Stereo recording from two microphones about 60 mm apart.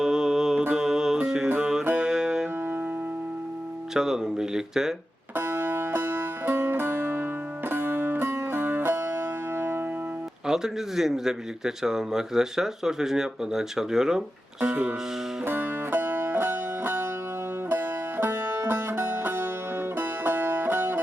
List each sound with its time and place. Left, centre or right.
0.0 s mantra: centre
0.7 s music: centre
3.9 s a man's voice: centre
5.3 s music: right
10.4 s a man's voice: centre
14.6 s music: right